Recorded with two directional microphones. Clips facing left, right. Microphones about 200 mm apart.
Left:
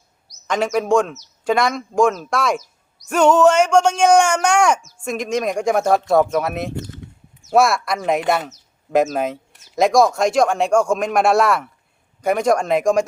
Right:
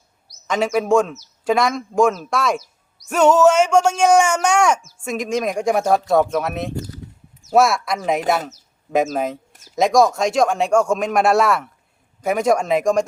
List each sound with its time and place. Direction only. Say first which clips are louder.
0.4 s speech: even; centre (ahead or behind)
6.7 s a sound: right 1 dB; 35° right (ahead or behind)
7.5 s speech: even; centre (ahead or behind)